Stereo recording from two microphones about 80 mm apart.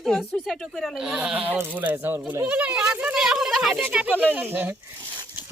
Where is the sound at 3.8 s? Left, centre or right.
Centre.